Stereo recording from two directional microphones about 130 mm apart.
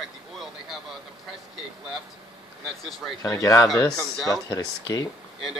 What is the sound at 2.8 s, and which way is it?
Speech, centre (ahead or behind).